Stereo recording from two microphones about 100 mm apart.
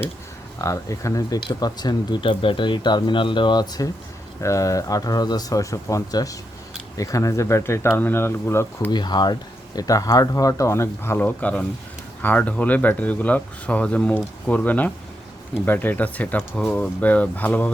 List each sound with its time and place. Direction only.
0.6 s speech: 35° left (ahead or behind)
4.4 s speech: 30° left (ahead or behind)
8.9 s speech: 45° left (ahead or behind); by 11.2 s 25° left (ahead or behind)
11.2 s speech: 15° left (ahead or behind)